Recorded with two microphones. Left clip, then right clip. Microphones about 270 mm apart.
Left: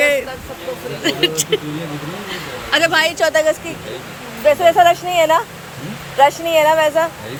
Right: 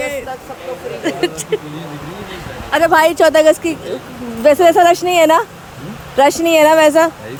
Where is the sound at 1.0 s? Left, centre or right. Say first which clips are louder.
Left 2 dB; centre.